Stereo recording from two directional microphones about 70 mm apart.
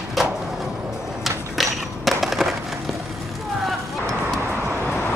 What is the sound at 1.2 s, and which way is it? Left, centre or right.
Skateboard, centre.